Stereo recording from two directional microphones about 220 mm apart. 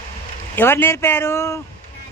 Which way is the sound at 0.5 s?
10° left (ahead or behind).